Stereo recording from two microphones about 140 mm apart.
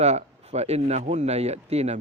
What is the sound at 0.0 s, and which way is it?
A man's voice, 50° right (ahead or behind).